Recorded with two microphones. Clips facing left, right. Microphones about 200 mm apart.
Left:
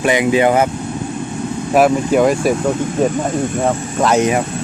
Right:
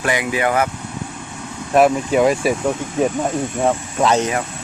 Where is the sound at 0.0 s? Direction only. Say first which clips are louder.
Left 6 dB; 20° left (ahead or behind).